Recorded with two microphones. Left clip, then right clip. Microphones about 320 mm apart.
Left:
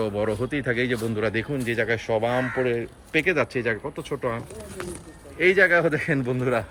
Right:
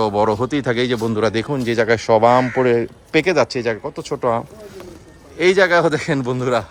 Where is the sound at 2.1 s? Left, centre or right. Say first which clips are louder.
Right 12 dB; right.